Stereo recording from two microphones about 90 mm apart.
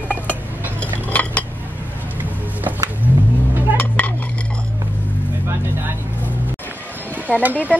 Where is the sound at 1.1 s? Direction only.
15° left (ahead or behind).